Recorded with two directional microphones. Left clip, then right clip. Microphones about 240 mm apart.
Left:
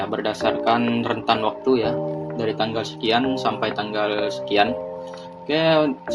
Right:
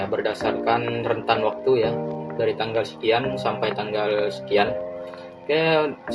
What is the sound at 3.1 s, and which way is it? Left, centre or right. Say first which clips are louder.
Speech: left 2 dB; left.